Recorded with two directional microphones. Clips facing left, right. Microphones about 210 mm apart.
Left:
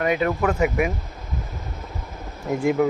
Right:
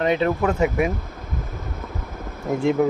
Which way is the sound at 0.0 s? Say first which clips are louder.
Right 1 dB; 25° right (ahead or behind).